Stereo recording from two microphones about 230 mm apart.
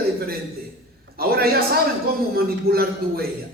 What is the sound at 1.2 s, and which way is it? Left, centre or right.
Speech, right.